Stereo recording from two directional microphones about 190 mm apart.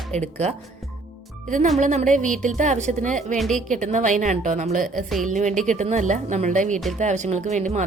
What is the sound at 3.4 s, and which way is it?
Speech, centre (ahead or behind).